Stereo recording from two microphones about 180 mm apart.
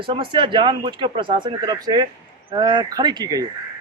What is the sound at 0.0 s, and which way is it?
Speech, 30° right (ahead or behind).